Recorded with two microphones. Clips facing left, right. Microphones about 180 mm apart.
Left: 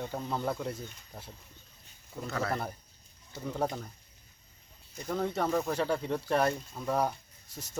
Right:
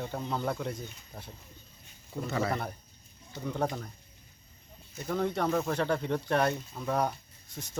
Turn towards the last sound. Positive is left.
turn(degrees=5)  # may be behind; listen again after turning